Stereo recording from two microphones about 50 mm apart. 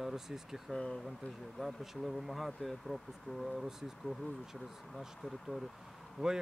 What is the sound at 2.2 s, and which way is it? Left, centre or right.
Speech, centre.